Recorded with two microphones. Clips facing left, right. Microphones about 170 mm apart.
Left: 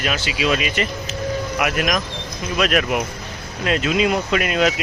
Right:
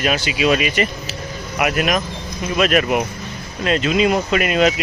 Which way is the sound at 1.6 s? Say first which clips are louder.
Right 5 dB; centre (ahead or behind).